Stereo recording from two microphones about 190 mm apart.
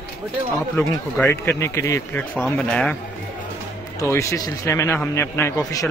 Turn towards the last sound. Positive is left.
turn(degrees=15)  # may be behind; listen again after turning